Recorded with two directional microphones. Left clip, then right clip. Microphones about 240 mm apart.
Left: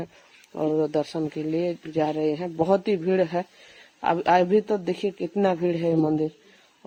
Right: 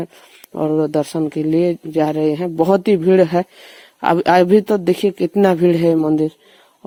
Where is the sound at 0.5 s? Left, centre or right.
Right.